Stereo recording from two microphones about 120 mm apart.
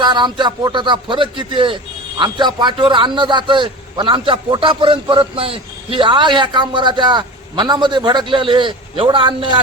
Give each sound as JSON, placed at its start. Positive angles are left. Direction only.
{"t": 0.0, "sound": "a man's voice", "side_deg": -40}